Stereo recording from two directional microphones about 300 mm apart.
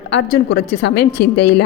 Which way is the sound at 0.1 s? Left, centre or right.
Left.